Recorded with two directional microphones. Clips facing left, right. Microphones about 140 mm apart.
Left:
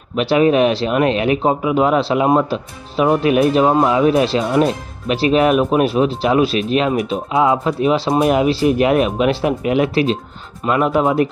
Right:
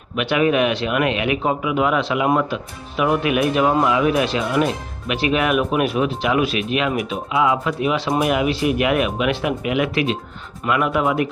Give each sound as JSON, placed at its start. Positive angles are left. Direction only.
{"t": 0.2, "sound": "speech", "side_deg": 30}